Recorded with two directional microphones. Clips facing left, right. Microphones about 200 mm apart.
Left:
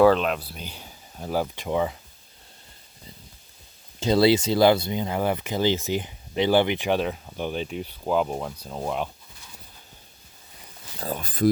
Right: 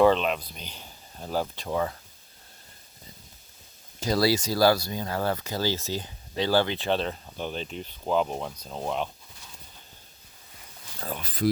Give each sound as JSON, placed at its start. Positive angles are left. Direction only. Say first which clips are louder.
{"t": 0.0, "sound": "speech", "louder": "left 3 dB", "side_deg": 5}
{"t": 4.0, "sound": "speech", "louder": "left 5 dB", "side_deg": 25}
{"t": 11.0, "sound": "speech", "louder": "left 5 dB", "side_deg": 45}